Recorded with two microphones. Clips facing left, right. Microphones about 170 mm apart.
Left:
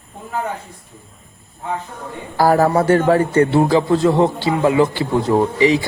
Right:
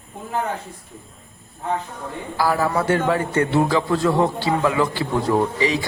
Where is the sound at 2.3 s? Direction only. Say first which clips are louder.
Left 7 dB; 45° left (ahead or behind).